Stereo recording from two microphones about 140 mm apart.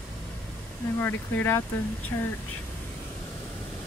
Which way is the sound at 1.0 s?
15° left (ahead or behind).